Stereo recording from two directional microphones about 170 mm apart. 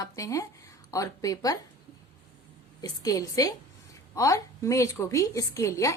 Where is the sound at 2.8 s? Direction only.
20° left (ahead or behind).